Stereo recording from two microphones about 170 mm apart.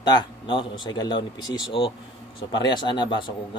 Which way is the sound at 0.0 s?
25° left (ahead or behind).